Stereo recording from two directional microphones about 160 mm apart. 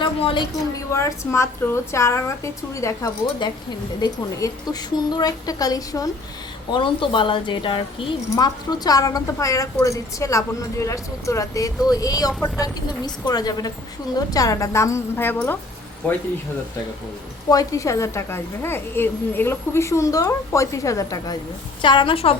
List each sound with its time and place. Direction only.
0.0 s speech: 30° left (ahead or behind)
0.9 s a woman's voice: 15° left (ahead or behind)
17.5 s a woman's voice: 20° left (ahead or behind)